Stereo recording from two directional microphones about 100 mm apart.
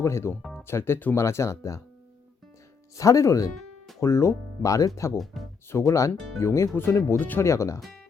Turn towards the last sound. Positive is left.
turn(degrees=30)  # may be behind; listen again after turning